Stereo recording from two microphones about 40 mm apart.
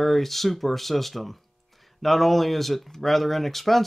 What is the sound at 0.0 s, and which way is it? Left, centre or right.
Speech, centre.